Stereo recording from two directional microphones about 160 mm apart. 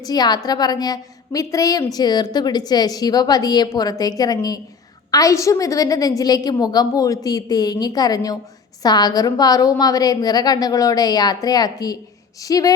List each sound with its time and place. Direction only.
0.0 s a woman's voice: 25° left (ahead or behind)